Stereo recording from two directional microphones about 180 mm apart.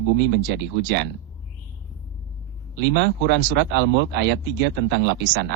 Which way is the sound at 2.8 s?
70° right (ahead or behind).